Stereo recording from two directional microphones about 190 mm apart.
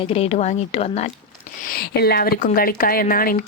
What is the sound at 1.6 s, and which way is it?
Speech, 55° left (ahead or behind).